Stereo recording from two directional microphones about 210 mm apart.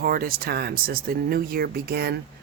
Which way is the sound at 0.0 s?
45° right (ahead or behind).